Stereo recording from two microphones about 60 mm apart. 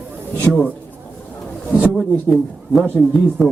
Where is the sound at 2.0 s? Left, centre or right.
Centre.